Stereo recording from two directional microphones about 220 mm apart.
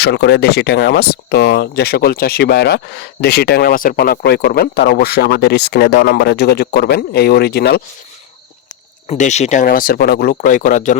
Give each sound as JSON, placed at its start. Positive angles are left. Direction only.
{"t": 0.0, "sound": "speech", "side_deg": 50}
{"t": 9.0, "sound": "speech", "side_deg": 30}